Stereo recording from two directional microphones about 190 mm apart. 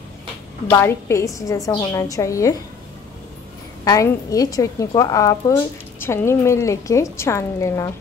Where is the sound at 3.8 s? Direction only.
20° left (ahead or behind).